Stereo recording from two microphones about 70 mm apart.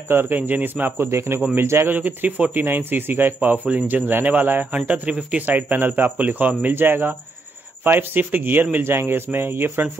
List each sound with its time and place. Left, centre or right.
0.1 s a man's voice: right
1.9 s a man's voice: right